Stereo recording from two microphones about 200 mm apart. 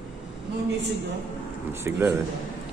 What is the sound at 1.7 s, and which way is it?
Speech, 10° right (ahead or behind).